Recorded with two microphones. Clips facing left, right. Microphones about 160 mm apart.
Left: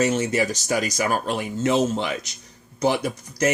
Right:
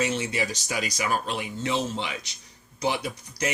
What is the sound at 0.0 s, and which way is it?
Speech, 45° left (ahead or behind).